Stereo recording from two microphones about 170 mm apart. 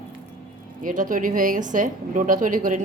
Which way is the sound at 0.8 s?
50° right (ahead or behind).